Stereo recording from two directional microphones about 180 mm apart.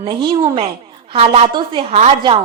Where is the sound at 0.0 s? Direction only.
30° right (ahead or behind).